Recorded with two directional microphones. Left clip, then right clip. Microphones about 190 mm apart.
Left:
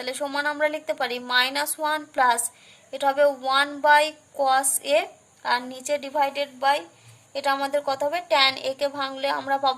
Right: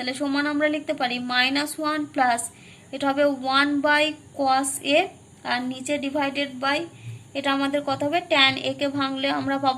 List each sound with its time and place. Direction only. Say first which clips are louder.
0.0 s a woman's voice: right 1 dB; 40° left (ahead or behind)